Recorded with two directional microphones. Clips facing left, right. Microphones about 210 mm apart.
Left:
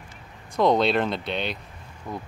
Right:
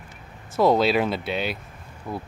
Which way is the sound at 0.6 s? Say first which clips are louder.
Right 1 dB; 5° right (ahead or behind).